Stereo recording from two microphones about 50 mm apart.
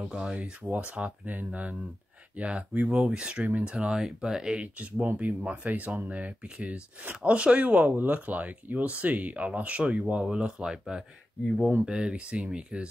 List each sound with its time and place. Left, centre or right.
0.1 s speech: centre
0.4 s speech: right
3.4 s speech: right
3.7 s speech: centre